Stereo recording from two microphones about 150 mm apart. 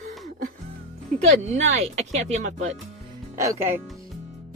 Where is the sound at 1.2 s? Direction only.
50° right (ahead or behind).